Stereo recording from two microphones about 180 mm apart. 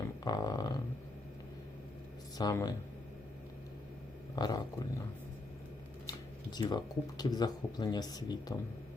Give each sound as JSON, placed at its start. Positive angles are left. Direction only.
{"t": 0.3, "sound": "speech", "side_deg": 20}
{"t": 2.4, "sound": "speech", "side_deg": 20}
{"t": 4.4, "sound": "speech", "side_deg": 20}
{"t": 6.1, "sound": "speech", "side_deg": 20}